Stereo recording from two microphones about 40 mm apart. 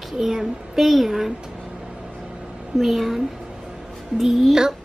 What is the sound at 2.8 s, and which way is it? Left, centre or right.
A child's voice, centre.